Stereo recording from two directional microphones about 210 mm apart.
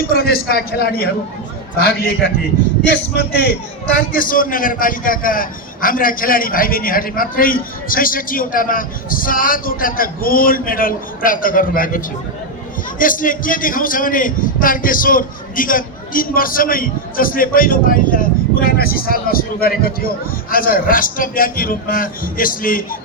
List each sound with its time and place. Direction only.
0.1 s a man's voice: 45° left (ahead or behind)
4.1 s a man's voice: 40° left (ahead or behind)